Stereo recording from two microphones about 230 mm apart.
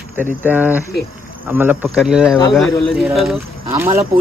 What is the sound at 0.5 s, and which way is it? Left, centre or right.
Speech, centre.